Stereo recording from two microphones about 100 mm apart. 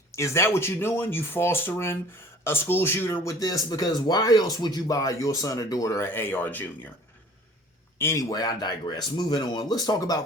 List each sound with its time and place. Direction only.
0.1 s speech: 30° left (ahead or behind)
3.4 s speech: 40° left (ahead or behind); by 6.7 s 20° left (ahead or behind)
7.9 s speech: 25° left (ahead or behind)
8.2 s speech: 40° left (ahead or behind)